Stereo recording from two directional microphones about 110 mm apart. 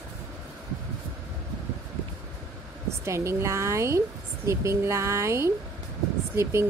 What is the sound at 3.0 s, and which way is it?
Speech, 25° right (ahead or behind).